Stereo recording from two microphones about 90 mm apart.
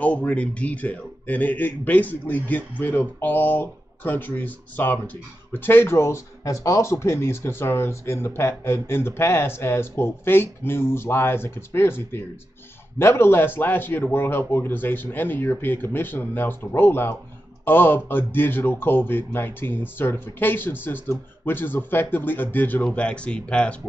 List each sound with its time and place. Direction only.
0.0 s a man's voice: 15° left (ahead or behind)